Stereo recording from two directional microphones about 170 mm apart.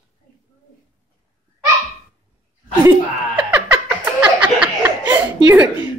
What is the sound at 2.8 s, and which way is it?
Laughter, 10° right (ahead or behind).